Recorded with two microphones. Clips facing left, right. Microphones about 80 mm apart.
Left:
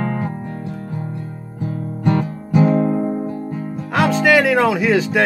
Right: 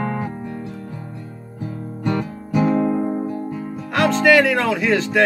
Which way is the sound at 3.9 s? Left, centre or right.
Centre.